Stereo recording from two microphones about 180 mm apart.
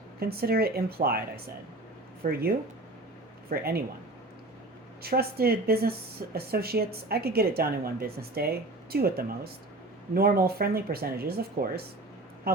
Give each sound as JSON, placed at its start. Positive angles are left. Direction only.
{"t": 0.2, "sound": "speech", "side_deg": -60}
{"t": 2.2, "sound": "speech", "side_deg": -50}
{"t": 3.5, "sound": "speech", "side_deg": -60}
{"t": 5.0, "sound": "speech", "side_deg": -60}